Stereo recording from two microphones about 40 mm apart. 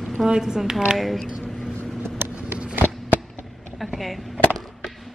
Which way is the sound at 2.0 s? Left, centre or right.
Right.